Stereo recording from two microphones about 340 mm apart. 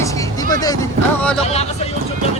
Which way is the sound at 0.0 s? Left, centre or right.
Centre.